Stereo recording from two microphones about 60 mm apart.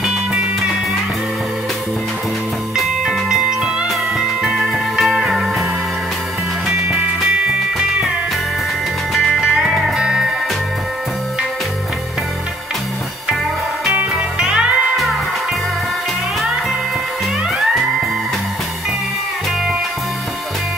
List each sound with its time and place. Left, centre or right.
0.3 s music: centre
2.7 s music: centre
6.7 s music: centre
9.1 s music: centre
9.4 s music: centre
9.8 s music: centre
14.1 s music: centre
17.5 s music: centre